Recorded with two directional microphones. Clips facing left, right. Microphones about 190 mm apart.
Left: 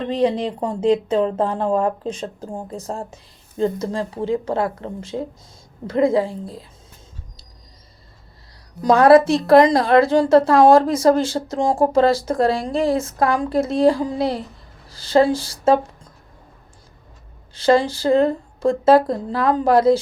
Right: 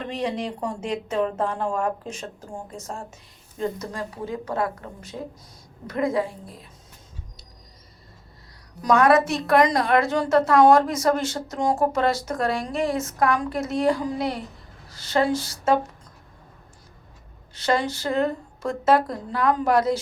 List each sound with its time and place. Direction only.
0.0 s a woman's voice: 30° left (ahead or behind)
8.8 s a woman's voice: 30° left (ahead or behind)
17.5 s a woman's voice: 30° left (ahead or behind)